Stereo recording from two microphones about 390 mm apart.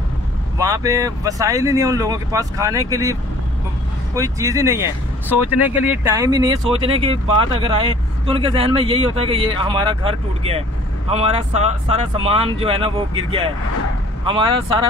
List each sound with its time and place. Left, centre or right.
0.6 s speech: centre